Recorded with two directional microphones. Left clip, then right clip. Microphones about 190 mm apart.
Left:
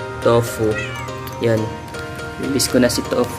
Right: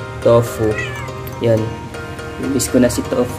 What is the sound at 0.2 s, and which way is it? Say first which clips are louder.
Speech: right 3 dB; centre (ahead or behind).